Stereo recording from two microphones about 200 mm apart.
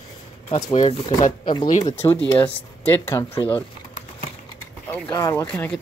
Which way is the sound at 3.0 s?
10° left (ahead or behind).